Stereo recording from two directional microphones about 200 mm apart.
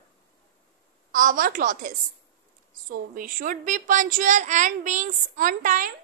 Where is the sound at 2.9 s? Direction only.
45° right (ahead or behind).